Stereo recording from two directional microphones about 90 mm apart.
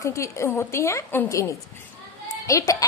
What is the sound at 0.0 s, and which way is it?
A woman's voice, 35° left (ahead or behind).